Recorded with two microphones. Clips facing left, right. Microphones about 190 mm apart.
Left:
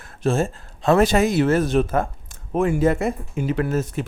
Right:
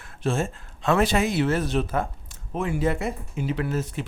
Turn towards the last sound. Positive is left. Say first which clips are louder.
# left 5 dB
turn(degrees=45)  # may be behind; listen again after turning